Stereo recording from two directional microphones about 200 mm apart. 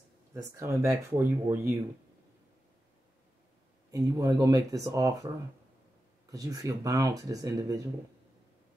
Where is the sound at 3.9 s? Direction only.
15° right (ahead or behind).